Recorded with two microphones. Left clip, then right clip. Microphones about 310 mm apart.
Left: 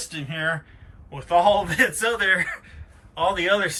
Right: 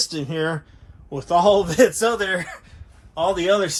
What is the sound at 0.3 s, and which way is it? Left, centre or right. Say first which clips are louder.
Speech: left 2 dB; centre.